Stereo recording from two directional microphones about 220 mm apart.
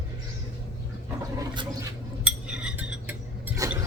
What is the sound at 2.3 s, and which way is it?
Cutlery, 5° right (ahead or behind).